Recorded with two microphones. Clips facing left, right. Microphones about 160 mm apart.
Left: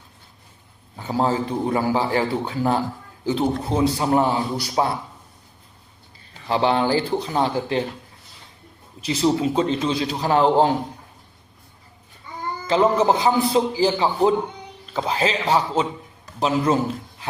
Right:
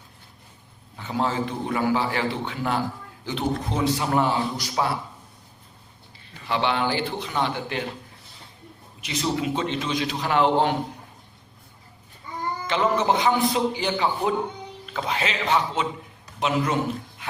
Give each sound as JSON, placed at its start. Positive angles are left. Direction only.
{"t": 0.9, "sound": "a man's voice", "side_deg": 35}
{"t": 6.5, "sound": "a man's voice", "side_deg": 35}
{"t": 9.0, "sound": "a man's voice", "side_deg": 30}
{"t": 12.6, "sound": "a man's voice", "side_deg": 30}